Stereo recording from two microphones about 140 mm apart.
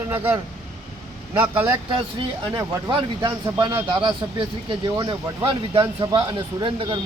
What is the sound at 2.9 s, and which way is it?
Speech, 35° right (ahead or behind).